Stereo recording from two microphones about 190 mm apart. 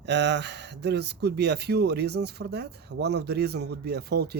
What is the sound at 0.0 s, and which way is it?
Speech, 65° right (ahead or behind).